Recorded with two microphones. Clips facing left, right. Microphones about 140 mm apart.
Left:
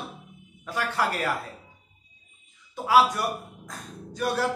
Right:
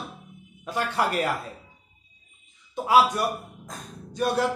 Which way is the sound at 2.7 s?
20° right (ahead or behind).